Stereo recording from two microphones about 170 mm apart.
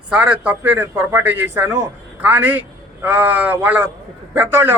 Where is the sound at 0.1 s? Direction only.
10° right (ahead or behind).